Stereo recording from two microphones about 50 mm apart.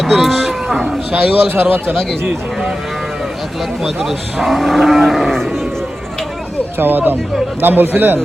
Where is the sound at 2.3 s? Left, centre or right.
Centre.